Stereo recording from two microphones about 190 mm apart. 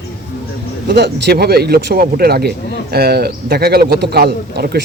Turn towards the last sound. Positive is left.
turn(degrees=-55)  # may be behind; listen again after turning